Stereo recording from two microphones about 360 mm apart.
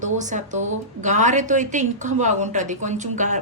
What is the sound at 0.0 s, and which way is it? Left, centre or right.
Speech, centre.